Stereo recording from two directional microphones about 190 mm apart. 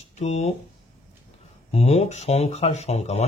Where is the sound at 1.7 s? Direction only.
35° left (ahead or behind).